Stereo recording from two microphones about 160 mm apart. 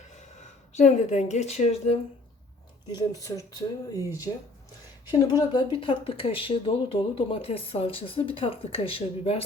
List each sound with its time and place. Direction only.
0.7 s a woman's voice: 45° left (ahead or behind)
2.8 s speech: 25° left (ahead or behind)
5.3 s speech: 25° left (ahead or behind)